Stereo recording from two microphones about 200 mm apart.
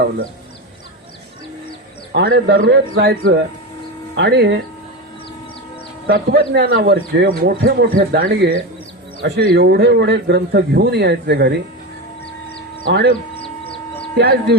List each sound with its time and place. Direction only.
2.1 s speech: 55° right (ahead or behind)
6.1 s speech: 55° right (ahead or behind)
12.8 s speech: 55° right (ahead or behind)
13.3 s bird: 30° left (ahead or behind)
14.2 s speech: 55° right (ahead or behind)